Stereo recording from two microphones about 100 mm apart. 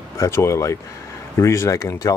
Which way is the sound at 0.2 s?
30° left (ahead or behind).